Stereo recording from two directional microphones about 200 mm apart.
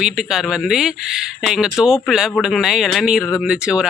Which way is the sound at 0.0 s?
Centre (ahead or behind).